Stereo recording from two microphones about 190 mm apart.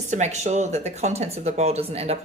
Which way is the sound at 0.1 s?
35° right (ahead or behind).